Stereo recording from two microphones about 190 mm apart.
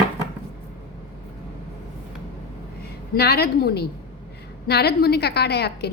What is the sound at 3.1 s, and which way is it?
A woman's voice, 55° left (ahead or behind).